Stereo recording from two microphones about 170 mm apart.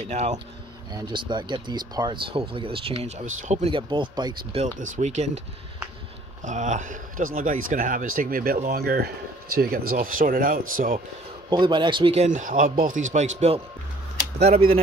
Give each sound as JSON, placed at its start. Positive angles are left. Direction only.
{"t": 0.1, "sound": "speech", "side_deg": -40}
{"t": 0.9, "sound": "speech", "side_deg": -25}
{"t": 3.7, "sound": "speech", "side_deg": -30}
{"t": 4.7, "sound": "speech", "side_deg": -45}
{"t": 6.4, "sound": "speech", "side_deg": -45}
{"t": 11.5, "sound": "speech", "side_deg": -30}
{"t": 12.3, "sound": "speech", "side_deg": -50}